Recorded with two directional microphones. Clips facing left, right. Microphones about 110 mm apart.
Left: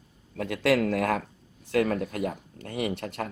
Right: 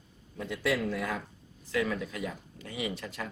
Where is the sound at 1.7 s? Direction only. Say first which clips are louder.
Left 6 dB; 55° left (ahead or behind).